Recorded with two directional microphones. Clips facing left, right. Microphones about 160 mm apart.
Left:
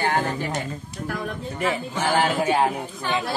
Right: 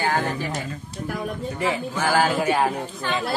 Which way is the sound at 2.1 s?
25° left (ahead or behind).